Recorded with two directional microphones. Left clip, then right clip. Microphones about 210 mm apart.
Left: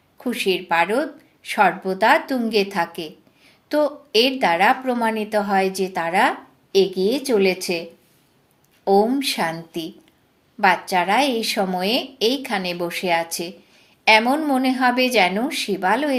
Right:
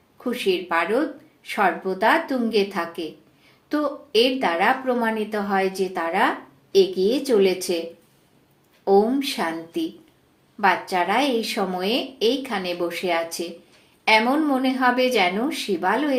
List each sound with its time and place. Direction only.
0.2 s a woman's voice: 40° left (ahead or behind)
8.8 s a woman's voice: 40° left (ahead or behind)